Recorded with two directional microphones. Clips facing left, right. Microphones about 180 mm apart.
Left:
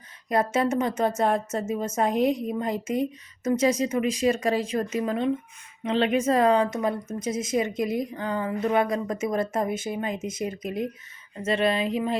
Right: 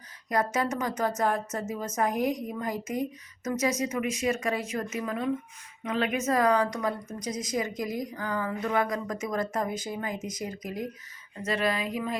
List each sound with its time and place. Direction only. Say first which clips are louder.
0.3 s a woman's voice: left 4 dB; 25° left (ahead or behind)